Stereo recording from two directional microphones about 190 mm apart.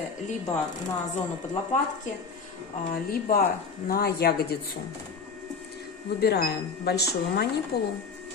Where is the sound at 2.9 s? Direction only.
50° left (ahead or behind).